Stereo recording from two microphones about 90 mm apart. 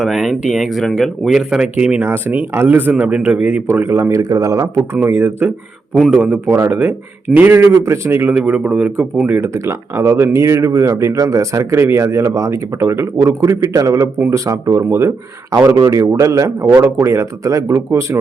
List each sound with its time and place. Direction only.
0.0 s speech: centre (ahead or behind)
2.0 s speech: 25° right (ahead or behind)
3.7 s speech: 25° right (ahead or behind)
5.0 s speech: 25° right (ahead or behind)
6.5 s speech: 25° right (ahead or behind)
8.3 s speech: 15° right (ahead or behind)
9.6 s speech: 35° right (ahead or behind)